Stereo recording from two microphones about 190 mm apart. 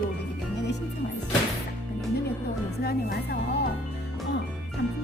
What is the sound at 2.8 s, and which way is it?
Speech, 55° left (ahead or behind).